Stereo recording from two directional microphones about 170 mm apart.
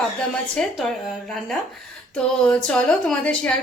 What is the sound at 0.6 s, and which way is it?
Speech, 5° left (ahead or behind).